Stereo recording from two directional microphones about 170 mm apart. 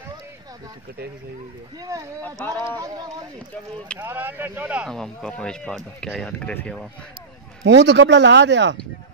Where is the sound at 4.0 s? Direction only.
10° right (ahead or behind).